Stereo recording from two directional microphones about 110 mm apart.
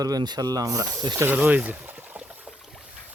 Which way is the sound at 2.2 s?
5° right (ahead or behind).